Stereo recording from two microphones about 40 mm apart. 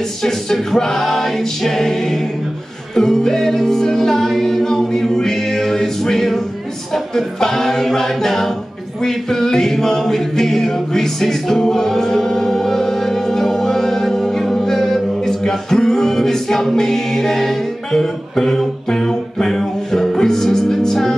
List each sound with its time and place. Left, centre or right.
0.2 s music: centre
9.0 s a capella: centre